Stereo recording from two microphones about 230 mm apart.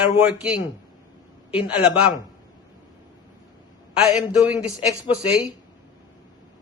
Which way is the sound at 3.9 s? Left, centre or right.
Centre.